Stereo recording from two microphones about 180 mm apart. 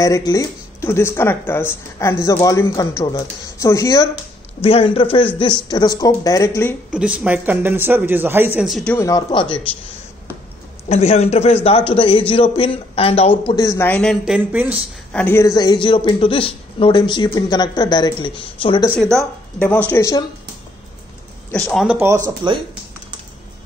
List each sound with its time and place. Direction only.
0.0 s speech: 20° left (ahead or behind)
4.6 s speech: 30° left (ahead or behind)
6.9 s speech: 5° right (ahead or behind)
8.9 s speech: 20° left (ahead or behind)
10.9 s a man's voice: 35° left (ahead or behind)
13.7 s speech: 10° left (ahead or behind)
14.2 s speech: 5° right (ahead or behind)
15.1 s speech: 15° left (ahead or behind)
19.1 s speech: 5° left (ahead or behind)
21.5 s speech: 5° left (ahead or behind)
21.9 s speech: 15° right (ahead or behind)